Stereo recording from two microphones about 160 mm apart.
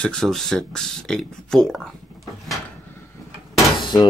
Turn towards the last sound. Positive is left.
turn(degrees=30)  # may be behind; listen again after turning